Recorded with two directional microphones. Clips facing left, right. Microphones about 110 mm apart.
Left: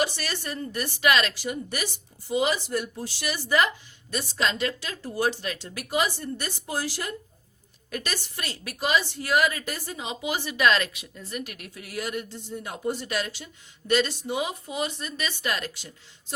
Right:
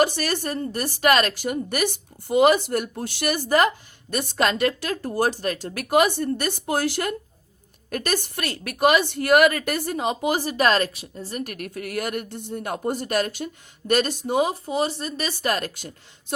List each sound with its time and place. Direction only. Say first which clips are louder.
0.0 s a woman's voice: right 7 dB; 50° right (ahead or behind)
7.9 s a woman's voice: right 7 dB; 50° right (ahead or behind)
14.6 s speech: right 6 dB; 35° right (ahead or behind); by 15.9 s 50° right (ahead or behind)